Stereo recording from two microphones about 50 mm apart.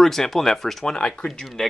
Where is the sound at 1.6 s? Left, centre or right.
Centre.